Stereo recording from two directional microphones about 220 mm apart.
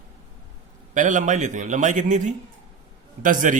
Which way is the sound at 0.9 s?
35° right (ahead or behind).